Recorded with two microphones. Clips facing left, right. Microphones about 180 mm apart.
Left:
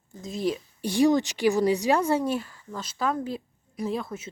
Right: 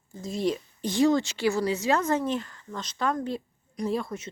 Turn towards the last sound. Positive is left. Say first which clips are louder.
# right 1 dB
turn(degrees=5)  # may be behind; listen again after turning